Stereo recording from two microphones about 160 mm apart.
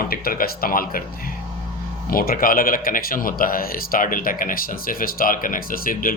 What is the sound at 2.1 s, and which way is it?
Speech, 65° left (ahead or behind).